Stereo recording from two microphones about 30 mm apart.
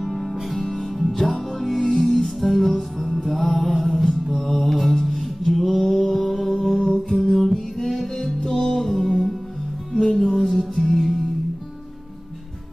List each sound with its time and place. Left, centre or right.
0.0 s music: centre
8.5 s music: centre
9.9 s music: centre